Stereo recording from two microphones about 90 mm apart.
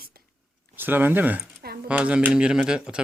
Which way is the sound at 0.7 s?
20° right (ahead or behind).